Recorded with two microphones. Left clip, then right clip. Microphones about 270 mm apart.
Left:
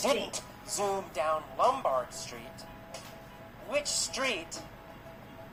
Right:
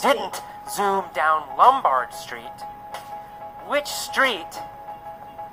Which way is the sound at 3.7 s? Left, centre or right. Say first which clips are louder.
Right 7 dB; right.